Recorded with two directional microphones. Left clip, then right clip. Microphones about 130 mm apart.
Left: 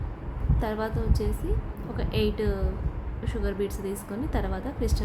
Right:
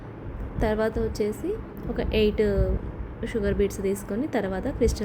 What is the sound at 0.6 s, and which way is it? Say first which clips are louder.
A woman's voice: right 6 dB; 10° right (ahead or behind).